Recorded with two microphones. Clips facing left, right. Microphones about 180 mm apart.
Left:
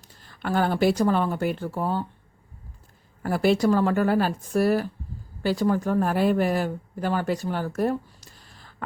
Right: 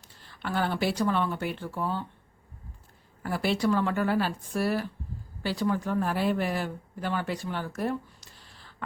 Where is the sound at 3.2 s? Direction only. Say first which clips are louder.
Left 6 dB; 45° left (ahead or behind).